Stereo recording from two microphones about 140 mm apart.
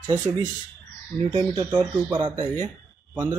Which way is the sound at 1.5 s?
30° right (ahead or behind).